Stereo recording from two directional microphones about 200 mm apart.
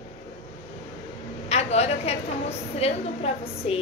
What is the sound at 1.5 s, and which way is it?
A woman's voice, 30° left (ahead or behind).